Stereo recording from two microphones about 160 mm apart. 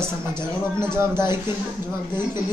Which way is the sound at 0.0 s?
15° right (ahead or behind).